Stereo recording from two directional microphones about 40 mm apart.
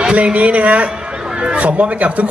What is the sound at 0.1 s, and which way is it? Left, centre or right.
Speech, right.